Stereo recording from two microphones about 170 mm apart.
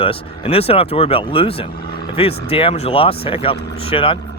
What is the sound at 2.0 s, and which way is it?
Vehicle, 35° left (ahead or behind).